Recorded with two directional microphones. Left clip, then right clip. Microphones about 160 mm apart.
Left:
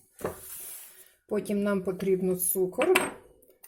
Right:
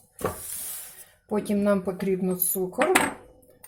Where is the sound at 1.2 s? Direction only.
40° left (ahead or behind).